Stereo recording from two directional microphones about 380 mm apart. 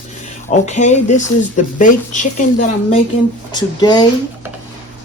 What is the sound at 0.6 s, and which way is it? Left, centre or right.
Speech, centre.